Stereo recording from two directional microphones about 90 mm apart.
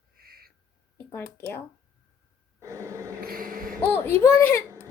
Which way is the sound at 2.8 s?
30° right (ahead or behind).